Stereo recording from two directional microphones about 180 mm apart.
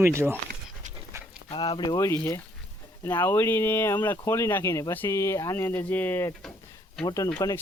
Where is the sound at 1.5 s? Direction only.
25° left (ahead or behind).